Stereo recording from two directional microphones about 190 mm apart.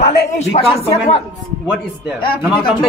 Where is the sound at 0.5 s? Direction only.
30° left (ahead or behind).